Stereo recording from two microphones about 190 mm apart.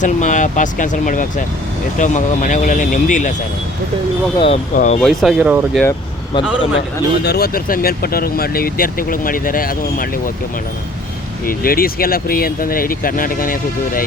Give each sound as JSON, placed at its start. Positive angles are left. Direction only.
{"t": 0.0, "sound": "speech", "side_deg": 40}
{"t": 4.4, "sound": "speech", "side_deg": 30}
{"t": 4.7, "sound": "speech", "side_deg": 40}
{"t": 5.0, "sound": "speech", "side_deg": -5}
{"t": 6.3, "sound": "speech", "side_deg": 30}
{"t": 7.3, "sound": "speech", "side_deg": 55}
{"t": 11.4, "sound": "speech", "side_deg": 50}